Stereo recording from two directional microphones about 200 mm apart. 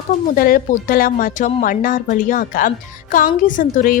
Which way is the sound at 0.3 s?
45° left (ahead or behind).